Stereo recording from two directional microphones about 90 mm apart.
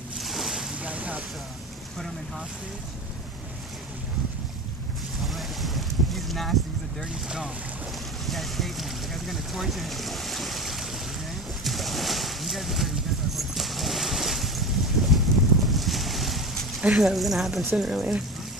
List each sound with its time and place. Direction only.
0.2 s boat: centre (ahead or behind)
0.8 s vehicle: 15° right (ahead or behind)
5.2 s boat: centre (ahead or behind)
7.1 s speech: 10° right (ahead or behind)
11.6 s a sound: centre (ahead or behind)
13.4 s boat: centre (ahead or behind)
16.8 s speech: 5° right (ahead or behind)